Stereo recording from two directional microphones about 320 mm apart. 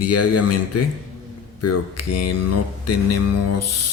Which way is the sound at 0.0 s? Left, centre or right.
Left.